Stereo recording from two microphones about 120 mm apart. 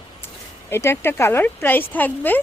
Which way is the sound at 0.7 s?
20° left (ahead or behind).